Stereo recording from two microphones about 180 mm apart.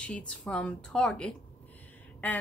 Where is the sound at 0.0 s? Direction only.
5° left (ahead or behind).